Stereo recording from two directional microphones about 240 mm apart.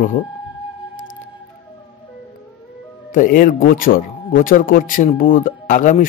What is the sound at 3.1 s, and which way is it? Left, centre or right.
Speech, left.